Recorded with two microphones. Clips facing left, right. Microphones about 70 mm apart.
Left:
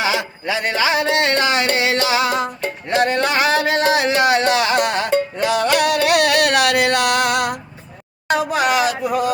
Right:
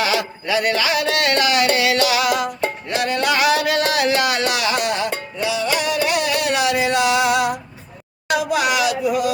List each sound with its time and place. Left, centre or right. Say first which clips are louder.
0.0 s music: even; left
5.4 s music: left 1 dB; left
8.3 s speech: left 1 dB; left